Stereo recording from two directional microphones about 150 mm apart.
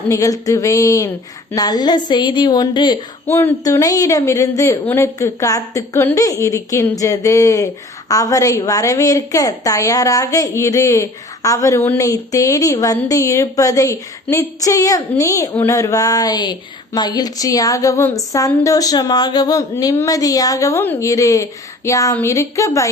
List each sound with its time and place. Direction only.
0.1 s a woman's voice: 20° left (ahead or behind)
3.2 s a woman's voice: 15° left (ahead or behind)